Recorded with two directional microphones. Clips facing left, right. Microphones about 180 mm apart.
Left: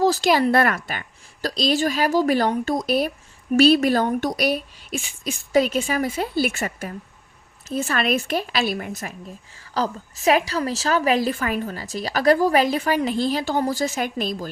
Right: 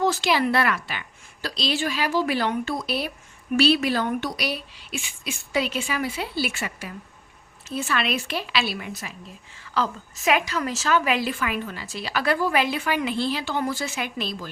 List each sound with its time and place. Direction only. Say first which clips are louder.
0.0 s speech: left 4 dB; 40° left (ahead or behind)
9.6 s a woman's voice: left 2 dB; 35° left (ahead or behind)